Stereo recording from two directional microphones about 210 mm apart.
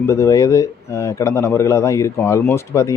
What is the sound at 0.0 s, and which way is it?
Speech, 15° left (ahead or behind).